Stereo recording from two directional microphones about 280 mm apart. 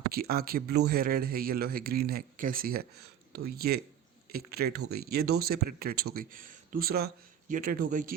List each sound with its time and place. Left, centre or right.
0.1 s speech: right